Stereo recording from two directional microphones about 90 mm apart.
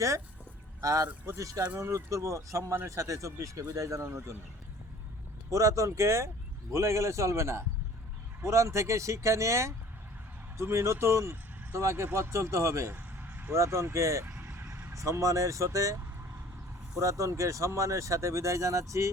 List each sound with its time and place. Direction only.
0.8 s speech: 35° right (ahead or behind)
5.5 s speech: 35° right (ahead or behind)
12.9 s vehicle: 20° right (ahead or behind)
13.6 s speech: 30° right (ahead or behind)
14.3 s speech: 25° right (ahead or behind)
17.0 s speech: 35° right (ahead or behind)